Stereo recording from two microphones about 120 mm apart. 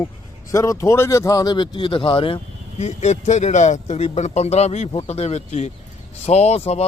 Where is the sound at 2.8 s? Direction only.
70° left (ahead or behind).